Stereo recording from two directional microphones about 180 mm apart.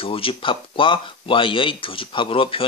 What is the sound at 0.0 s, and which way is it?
Speech, 30° left (ahead or behind).